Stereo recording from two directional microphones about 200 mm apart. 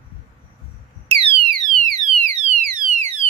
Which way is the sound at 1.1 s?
30° right (ahead or behind).